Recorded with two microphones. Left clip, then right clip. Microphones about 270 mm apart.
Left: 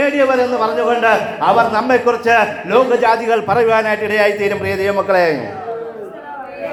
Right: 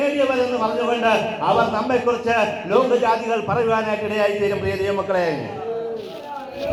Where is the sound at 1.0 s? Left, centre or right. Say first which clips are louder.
Left 4 dB; left.